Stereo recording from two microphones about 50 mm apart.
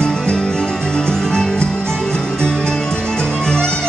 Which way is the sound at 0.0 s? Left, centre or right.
Centre.